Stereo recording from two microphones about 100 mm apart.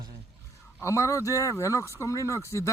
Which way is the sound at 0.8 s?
30° left (ahead or behind).